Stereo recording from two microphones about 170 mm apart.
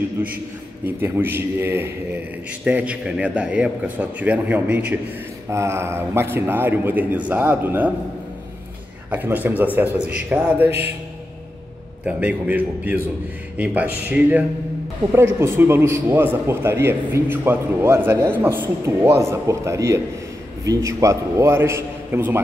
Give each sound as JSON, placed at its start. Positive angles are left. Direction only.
{"t": 0.2, "sound": "a man's voice", "side_deg": -10}
{"t": 9.1, "sound": "a man's voice", "side_deg": -10}
{"t": 12.1, "sound": "a man's voice", "side_deg": -10}